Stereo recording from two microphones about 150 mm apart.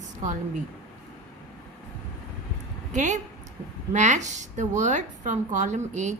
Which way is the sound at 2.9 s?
55° right (ahead or behind).